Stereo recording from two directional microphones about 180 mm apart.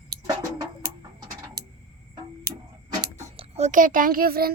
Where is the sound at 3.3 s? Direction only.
35° right (ahead or behind); by 4.5 s 55° right (ahead or behind).